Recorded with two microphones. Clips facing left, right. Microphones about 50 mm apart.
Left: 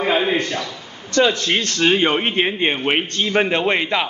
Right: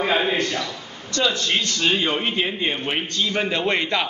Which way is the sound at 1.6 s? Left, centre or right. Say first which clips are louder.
Left 7 dB; left.